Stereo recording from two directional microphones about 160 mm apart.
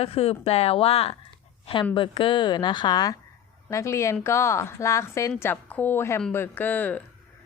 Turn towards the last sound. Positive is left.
turn(degrees=10)  # may be behind; listen again after turning